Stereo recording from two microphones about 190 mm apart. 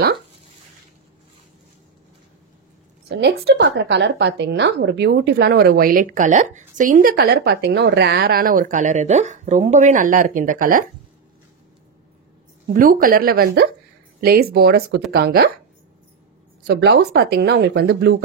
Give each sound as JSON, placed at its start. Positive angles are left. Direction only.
{"t": 3.1, "sound": "a woman's voice", "side_deg": -65}
{"t": 12.6, "sound": "a woman's voice", "side_deg": -50}
{"t": 16.6, "sound": "a woman's voice", "side_deg": -65}